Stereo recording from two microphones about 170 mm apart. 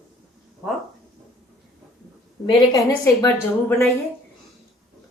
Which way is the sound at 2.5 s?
20° left (ahead or behind).